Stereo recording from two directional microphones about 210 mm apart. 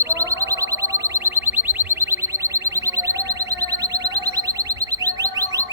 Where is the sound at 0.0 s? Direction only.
15° right (ahead or behind).